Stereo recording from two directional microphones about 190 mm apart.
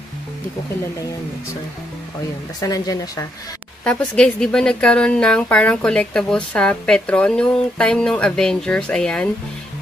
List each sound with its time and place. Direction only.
2.6 s speech: 20° left (ahead or behind)
3.8 s a woman's voice: 5° left (ahead or behind)